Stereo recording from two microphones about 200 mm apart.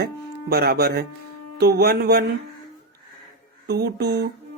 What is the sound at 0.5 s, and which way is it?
Speech, 50° right (ahead or behind).